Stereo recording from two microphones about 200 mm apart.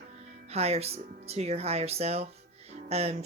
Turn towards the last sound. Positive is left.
turn(degrees=-30)  # may be behind; listen again after turning